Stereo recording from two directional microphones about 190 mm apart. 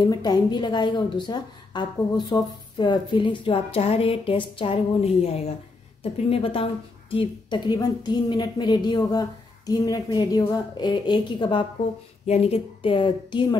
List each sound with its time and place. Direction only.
0.0 s a woman's voice: 20° left (ahead or behind)